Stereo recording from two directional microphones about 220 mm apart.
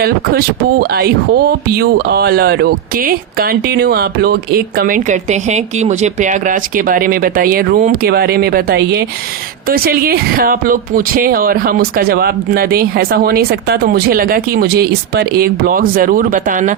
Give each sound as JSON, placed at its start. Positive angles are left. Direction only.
{"t": 0.0, "sound": "speech", "side_deg": -45}